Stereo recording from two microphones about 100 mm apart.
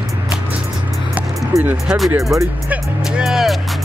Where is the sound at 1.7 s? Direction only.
5° right (ahead or behind).